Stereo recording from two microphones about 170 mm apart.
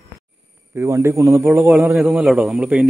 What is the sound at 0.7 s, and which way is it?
A man's voice, 15° right (ahead or behind).